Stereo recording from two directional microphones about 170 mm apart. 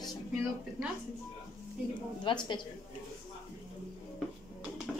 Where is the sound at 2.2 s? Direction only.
25° left (ahead or behind).